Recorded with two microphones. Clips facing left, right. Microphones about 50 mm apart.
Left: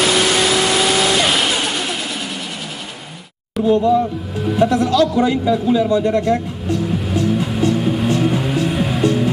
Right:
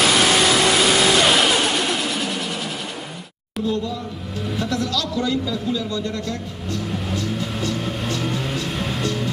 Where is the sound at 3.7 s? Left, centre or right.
Left.